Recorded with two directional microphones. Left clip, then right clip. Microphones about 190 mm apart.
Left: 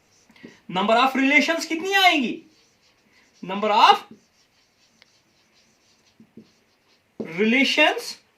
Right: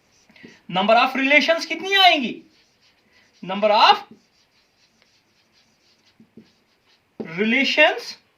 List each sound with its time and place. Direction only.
0.4 s speech: 10° right (ahead or behind)
3.4 s speech: 10° right (ahead or behind)
7.3 s speech: 5° right (ahead or behind)